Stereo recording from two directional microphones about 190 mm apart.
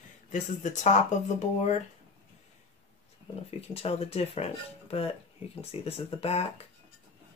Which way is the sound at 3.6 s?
30° left (ahead or behind).